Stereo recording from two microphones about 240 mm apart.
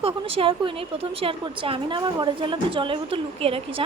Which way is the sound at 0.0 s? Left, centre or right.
Right.